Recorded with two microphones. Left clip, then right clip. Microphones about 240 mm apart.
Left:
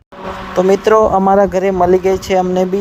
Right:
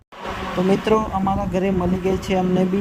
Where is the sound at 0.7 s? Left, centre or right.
Centre.